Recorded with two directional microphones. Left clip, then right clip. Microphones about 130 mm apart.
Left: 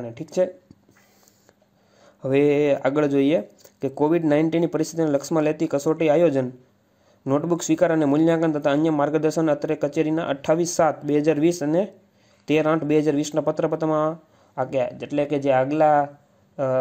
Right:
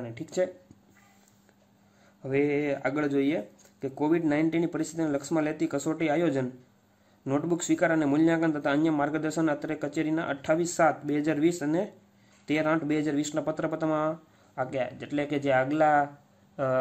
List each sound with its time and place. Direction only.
0.1 s speech: 35° left (ahead or behind)
2.2 s speech: 60° left (ahead or behind)
8.7 s speech: 30° left (ahead or behind)
9.0 s a man's voice: 45° left (ahead or behind); by 16.7 s 25° left (ahead or behind)